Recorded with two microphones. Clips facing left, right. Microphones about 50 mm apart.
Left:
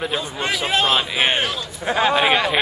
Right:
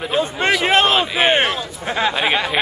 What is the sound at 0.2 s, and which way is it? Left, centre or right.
A man's voice, right.